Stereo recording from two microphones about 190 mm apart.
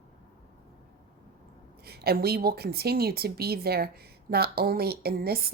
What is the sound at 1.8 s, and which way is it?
Speech, 55° right (ahead or behind).